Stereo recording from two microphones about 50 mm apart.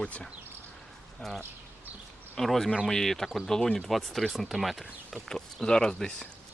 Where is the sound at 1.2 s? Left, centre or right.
Centre.